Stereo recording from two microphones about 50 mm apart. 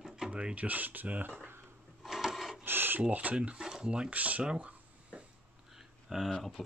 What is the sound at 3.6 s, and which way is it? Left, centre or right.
Speech, centre.